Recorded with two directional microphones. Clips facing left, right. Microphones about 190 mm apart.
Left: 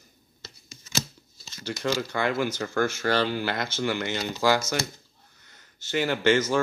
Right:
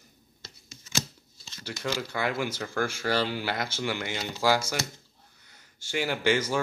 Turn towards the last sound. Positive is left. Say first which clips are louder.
# left 4 dB
turn(degrees=-10)  # may be behind; listen again after turning